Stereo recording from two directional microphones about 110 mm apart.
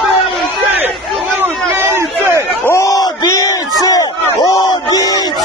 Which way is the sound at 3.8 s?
35° left (ahead or behind).